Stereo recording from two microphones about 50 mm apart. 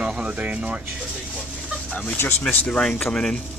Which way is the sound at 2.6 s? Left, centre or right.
Left.